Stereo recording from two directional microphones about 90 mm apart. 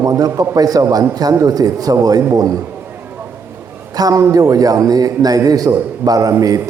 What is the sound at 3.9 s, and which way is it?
A man's voice, 45° right (ahead or behind).